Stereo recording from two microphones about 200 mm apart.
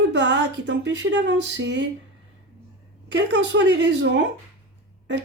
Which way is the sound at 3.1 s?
60° right (ahead or behind).